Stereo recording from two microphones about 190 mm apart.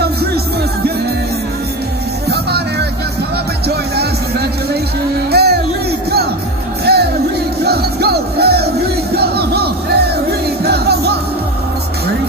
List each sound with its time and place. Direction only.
0.0 s music: 55° right (ahead or behind)
2.2 s music: 60° right (ahead or behind)
5.3 s a sound: 55° right (ahead or behind)
6.8 s music: 55° right (ahead or behind)